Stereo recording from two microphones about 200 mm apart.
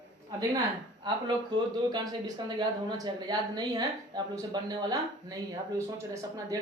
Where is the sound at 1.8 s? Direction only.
20° right (ahead or behind).